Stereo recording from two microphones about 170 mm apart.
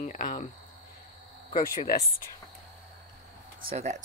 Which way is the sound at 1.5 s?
60° left (ahead or behind).